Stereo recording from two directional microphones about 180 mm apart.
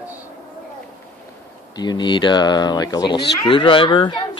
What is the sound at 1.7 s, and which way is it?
Speech, 25° left (ahead or behind).